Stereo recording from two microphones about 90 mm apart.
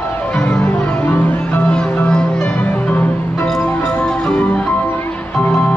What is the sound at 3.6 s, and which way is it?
Music, 20° left (ahead or behind).